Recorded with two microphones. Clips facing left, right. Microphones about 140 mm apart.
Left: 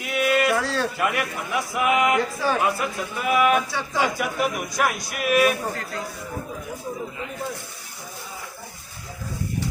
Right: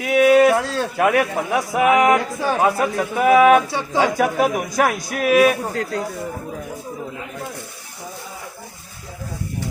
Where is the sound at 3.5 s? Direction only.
60° right (ahead or behind).